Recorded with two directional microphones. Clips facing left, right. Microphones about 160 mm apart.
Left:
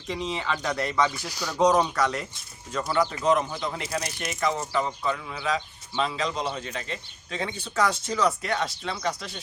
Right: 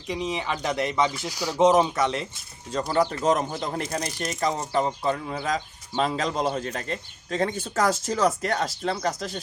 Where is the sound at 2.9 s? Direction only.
40° right (ahead or behind).